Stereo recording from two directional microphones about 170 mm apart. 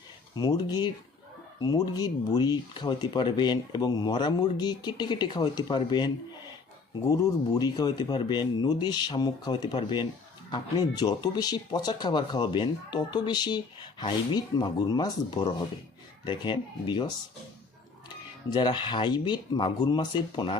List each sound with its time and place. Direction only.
0.3 s speech: 25° left (ahead or behind)
18.5 s speech: 25° left (ahead or behind)